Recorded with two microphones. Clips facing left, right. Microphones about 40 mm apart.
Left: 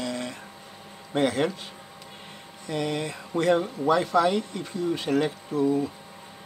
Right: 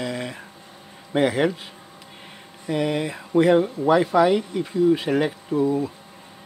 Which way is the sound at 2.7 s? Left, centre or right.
Centre.